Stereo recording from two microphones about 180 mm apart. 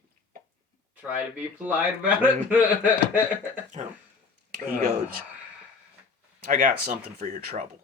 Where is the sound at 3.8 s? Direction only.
35° right (ahead or behind).